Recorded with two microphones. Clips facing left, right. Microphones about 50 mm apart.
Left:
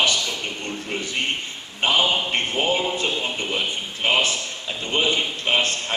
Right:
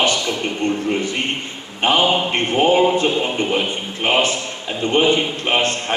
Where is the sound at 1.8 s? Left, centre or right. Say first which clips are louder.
Right 4 dB; right.